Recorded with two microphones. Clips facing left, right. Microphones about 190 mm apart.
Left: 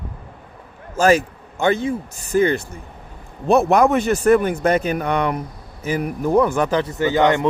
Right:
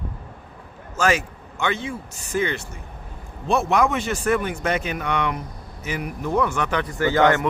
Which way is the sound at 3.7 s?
40° left (ahead or behind).